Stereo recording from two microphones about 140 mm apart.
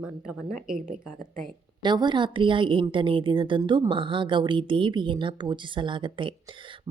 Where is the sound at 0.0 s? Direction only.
5° right (ahead or behind).